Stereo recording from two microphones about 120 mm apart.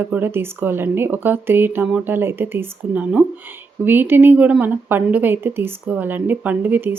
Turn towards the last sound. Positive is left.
turn(degrees=-15)  # may be behind; listen again after turning